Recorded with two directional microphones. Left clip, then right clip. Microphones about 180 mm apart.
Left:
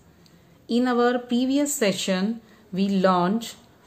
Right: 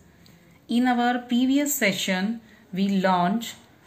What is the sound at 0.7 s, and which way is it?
Speech, 45° left (ahead or behind).